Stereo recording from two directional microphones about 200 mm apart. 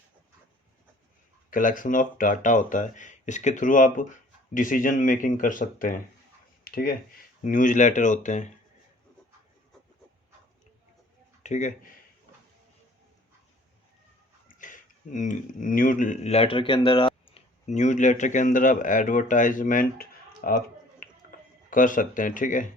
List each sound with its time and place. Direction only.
1.5 s speech: 40° left (ahead or behind)
11.4 s speech: 35° left (ahead or behind)
14.4 s speech: 40° left (ahead or behind)
21.0 s a sound: 40° left (ahead or behind)